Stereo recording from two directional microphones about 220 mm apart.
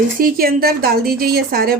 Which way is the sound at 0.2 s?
40° right (ahead or behind).